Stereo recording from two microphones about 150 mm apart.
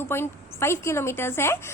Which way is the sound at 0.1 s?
15° left (ahead or behind).